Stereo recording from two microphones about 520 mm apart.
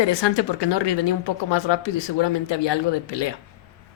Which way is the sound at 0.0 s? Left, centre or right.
Left.